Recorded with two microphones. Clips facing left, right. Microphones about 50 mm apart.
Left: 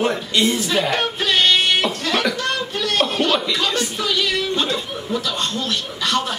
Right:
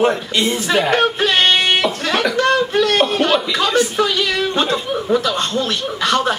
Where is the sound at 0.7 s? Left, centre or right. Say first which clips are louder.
Right 5 dB; right.